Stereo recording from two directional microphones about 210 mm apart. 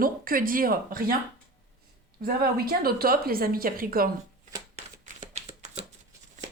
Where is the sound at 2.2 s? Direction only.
45° right (ahead or behind).